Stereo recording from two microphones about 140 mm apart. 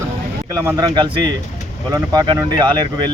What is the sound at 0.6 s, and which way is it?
Speech, 30° right (ahead or behind).